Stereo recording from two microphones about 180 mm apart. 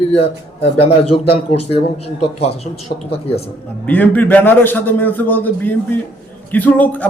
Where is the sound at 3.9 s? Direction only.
10° left (ahead or behind).